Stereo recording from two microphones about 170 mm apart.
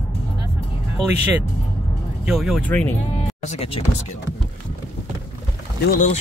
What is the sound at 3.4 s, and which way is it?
Speech, 35° left (ahead or behind).